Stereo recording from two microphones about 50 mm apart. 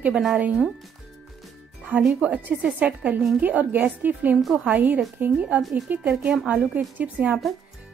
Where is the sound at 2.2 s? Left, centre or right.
Right.